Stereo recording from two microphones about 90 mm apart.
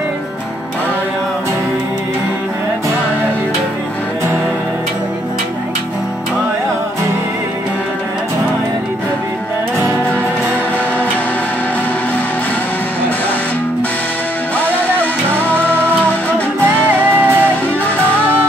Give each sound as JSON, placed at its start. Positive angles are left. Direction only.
{"t": 14.6, "sound": "music", "side_deg": 20}
{"t": 17.1, "sound": "music", "side_deg": -20}